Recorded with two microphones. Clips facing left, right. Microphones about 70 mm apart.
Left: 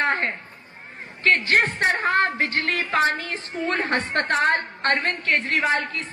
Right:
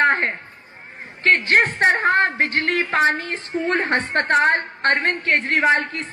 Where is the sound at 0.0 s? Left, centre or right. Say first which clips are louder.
Right 5 dB; right.